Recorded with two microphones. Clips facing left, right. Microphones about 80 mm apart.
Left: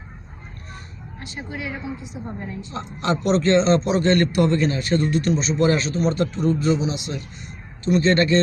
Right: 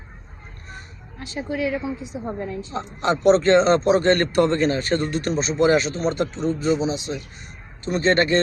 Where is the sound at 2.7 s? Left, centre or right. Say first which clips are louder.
Right 1 dB; right.